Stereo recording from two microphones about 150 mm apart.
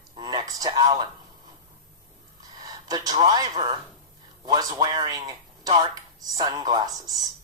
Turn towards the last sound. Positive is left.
turn(degrees=-25)  # may be behind; listen again after turning